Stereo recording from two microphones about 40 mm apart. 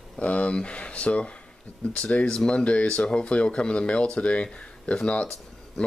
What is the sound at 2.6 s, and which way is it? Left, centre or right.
Speech, left.